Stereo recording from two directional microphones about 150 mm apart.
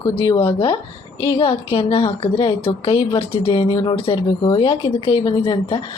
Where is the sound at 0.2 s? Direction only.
35° left (ahead or behind).